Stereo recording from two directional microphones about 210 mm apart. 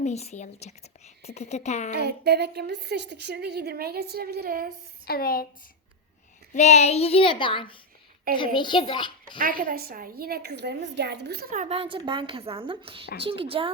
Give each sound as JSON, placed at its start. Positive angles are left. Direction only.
{"t": 0.0, "sound": "speech", "side_deg": 30}
{"t": 1.9, "sound": "a woman's voice", "side_deg": -50}
{"t": 5.0, "sound": "a woman's voice", "side_deg": 45}
{"t": 6.5, "sound": "a child's voice", "side_deg": 35}
{"t": 9.4, "sound": "a woman's voice", "side_deg": -40}